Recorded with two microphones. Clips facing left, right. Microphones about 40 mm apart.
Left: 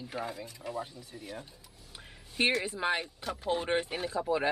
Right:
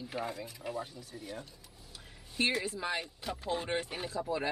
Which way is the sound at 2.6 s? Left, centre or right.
Left.